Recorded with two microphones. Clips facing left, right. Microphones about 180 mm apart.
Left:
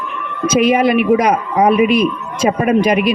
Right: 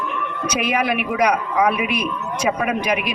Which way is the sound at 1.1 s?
50° left (ahead or behind).